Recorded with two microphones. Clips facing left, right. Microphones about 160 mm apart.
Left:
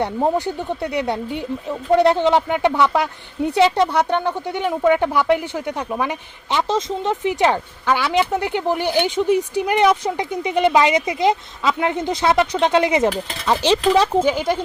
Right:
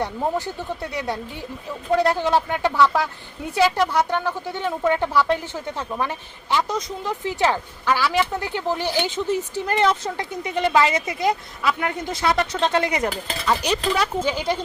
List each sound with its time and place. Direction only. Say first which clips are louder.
0.3 s a woman's voice: left 5 dB; 15° left (ahead or behind)
14.3 s a woman's voice: left 4 dB; 15° left (ahead or behind)